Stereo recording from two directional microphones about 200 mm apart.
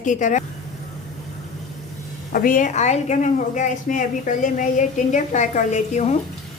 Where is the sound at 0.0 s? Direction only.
40° left (ahead or behind).